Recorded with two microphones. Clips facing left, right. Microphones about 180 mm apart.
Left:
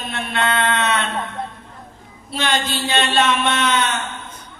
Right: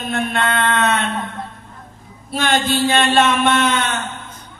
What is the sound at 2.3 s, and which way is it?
A man's voice, 50° right (ahead or behind).